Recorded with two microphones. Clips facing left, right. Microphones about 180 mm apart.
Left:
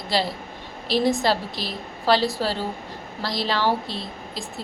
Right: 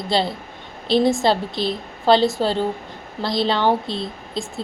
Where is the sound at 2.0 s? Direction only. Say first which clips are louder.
Right 5 dB; 25° right (ahead or behind).